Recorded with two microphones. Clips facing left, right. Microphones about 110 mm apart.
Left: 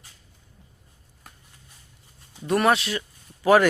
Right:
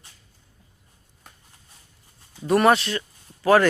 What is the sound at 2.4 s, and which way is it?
Speech, centre (ahead or behind).